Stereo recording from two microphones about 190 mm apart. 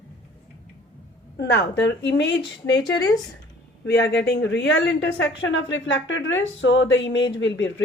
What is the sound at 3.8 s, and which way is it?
A woman's voice, 65° left (ahead or behind).